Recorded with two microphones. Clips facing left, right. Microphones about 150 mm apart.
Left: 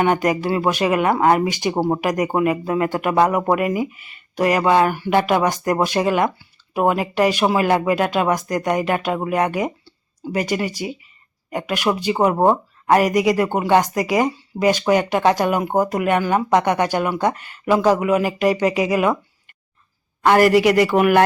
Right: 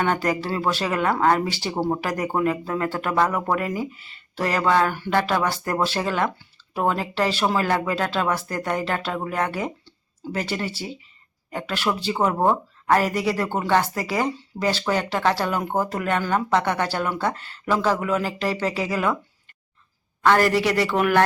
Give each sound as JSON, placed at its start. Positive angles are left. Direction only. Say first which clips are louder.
{"t": 0.0, "sound": "speech", "louder": "left 5 dB", "side_deg": 15}
{"t": 20.2, "sound": "speech", "louder": "left 5 dB", "side_deg": 15}